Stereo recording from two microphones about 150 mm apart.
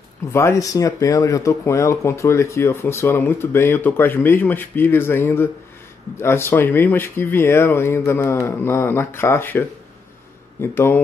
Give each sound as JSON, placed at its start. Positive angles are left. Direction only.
{"t": 0.3, "sound": "speech", "side_deg": 20}